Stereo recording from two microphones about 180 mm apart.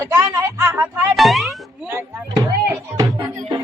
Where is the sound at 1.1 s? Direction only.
Centre (ahead or behind).